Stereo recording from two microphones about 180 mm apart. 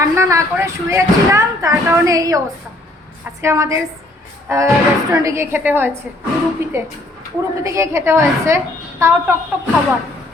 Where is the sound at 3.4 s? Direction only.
15° right (ahead or behind).